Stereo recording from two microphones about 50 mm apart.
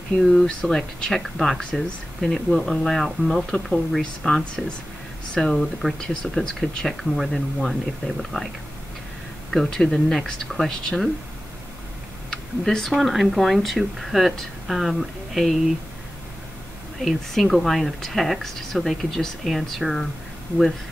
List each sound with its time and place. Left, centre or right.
0.2 s speech: centre
9.5 s speech: centre
12.3 s speech: centre
17.0 s speech: centre